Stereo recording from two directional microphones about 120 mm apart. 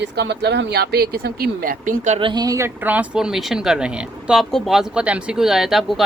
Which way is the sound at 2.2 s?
45° right (ahead or behind).